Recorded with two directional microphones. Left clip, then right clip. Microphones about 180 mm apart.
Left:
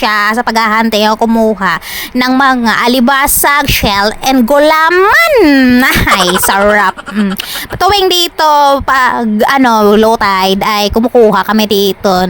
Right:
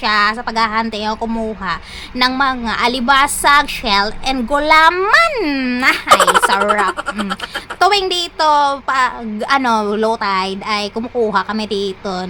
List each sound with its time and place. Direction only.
0.0 s a woman's voice: 60° left (ahead or behind); by 5.8 s 45° left (ahead or behind)
5.8 s a woman's voice: 60° left (ahead or behind)
6.1 s speech: centre (ahead or behind)
6.5 s a woman's voice: 50° left (ahead or behind)